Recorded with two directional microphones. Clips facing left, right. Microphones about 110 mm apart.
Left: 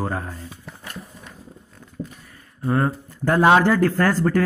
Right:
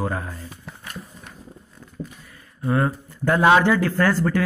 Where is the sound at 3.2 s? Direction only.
35° left (ahead or behind).